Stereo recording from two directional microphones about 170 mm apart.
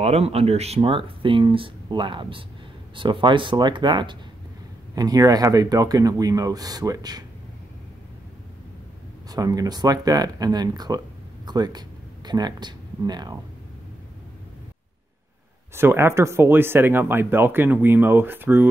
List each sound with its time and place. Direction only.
0.0 s speech: 35° right (ahead or behind)
9.3 s speech: 20° right (ahead or behind)
15.7 s speech: 15° right (ahead or behind)